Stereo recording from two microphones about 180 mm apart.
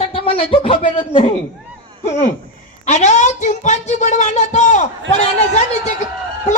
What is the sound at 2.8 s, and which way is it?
A woman's voice, 40° left (ahead or behind).